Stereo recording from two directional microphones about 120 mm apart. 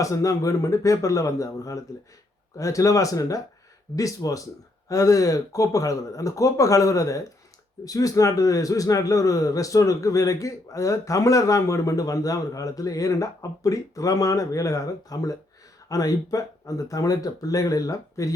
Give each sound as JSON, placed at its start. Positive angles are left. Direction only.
{"t": 0.0, "sound": "a man's voice", "side_deg": 30}